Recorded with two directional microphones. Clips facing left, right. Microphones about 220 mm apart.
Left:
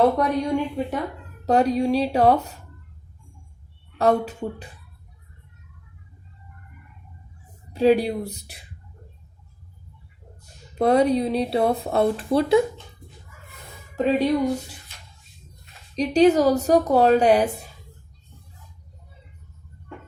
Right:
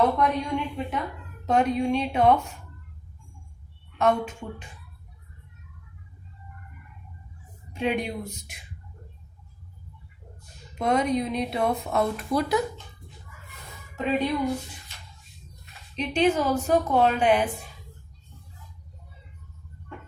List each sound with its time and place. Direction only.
0.2 s speech: 35° left (ahead or behind)
3.9 s speech: 35° left (ahead or behind)
7.7 s speech: 35° left (ahead or behind)
10.8 s speech: 35° left (ahead or behind)
13.9 s speech: 35° left (ahead or behind)
16.0 s speech: 40° left (ahead or behind)